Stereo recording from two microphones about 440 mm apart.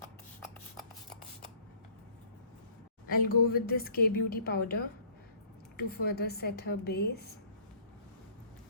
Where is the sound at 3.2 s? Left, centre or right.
Left.